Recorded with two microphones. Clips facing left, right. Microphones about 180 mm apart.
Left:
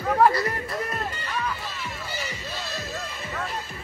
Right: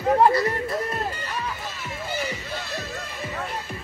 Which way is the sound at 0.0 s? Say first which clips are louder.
Right 2 dB; 30° right (ahead or behind).